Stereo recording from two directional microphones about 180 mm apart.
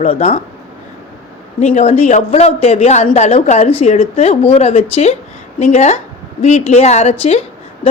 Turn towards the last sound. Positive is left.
turn(degrees=35)  # may be behind; listen again after turning